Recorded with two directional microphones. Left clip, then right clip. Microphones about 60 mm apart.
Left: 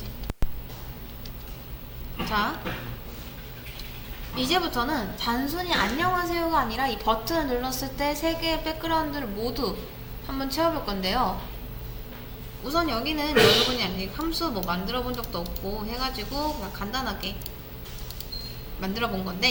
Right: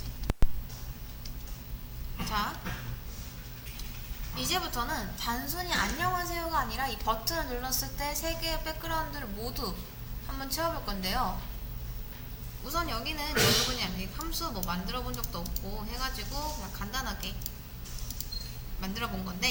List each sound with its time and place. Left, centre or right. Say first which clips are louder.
2.2 s a sound: left 6 dB; right
4.4 s a woman's voice: left 7 dB; right
12.6 s a woman's voice: left 7 dB; right
18.8 s a woman's voice: left 7 dB; right